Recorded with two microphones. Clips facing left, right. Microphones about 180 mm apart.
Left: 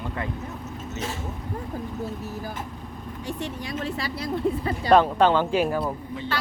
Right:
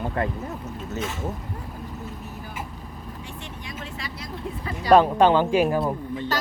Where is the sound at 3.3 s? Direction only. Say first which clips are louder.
Left 7 dB; 40° left (ahead or behind).